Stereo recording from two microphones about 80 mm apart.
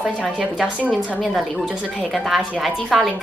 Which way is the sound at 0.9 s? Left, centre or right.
Centre.